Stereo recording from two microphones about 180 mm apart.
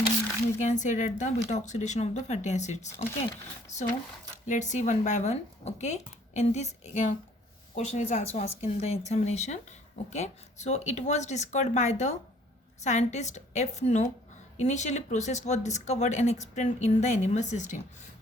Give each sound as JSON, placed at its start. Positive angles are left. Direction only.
{"t": 0.6, "sound": "speech", "side_deg": 45}
{"t": 4.4, "sound": "speech", "side_deg": 40}